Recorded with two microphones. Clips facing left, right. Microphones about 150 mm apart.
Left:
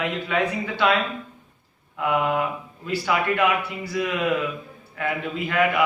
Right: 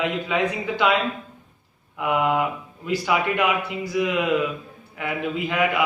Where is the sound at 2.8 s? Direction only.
15° right (ahead or behind).